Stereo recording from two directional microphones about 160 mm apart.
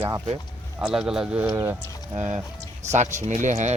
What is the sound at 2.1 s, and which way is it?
Speech, 45° right (ahead or behind).